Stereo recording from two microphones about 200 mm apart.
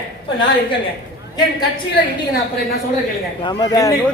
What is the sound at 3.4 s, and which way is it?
Speech, 20° left (ahead or behind).